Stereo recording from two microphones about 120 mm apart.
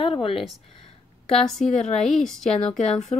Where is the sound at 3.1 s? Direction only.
55° left (ahead or behind).